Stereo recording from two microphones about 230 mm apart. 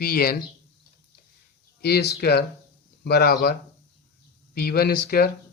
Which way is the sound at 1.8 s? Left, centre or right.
Left.